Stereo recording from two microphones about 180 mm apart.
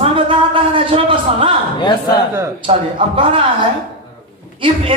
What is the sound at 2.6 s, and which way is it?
Speech, 30° right (ahead or behind).